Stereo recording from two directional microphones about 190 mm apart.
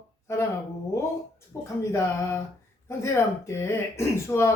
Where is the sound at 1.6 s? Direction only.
15° left (ahead or behind).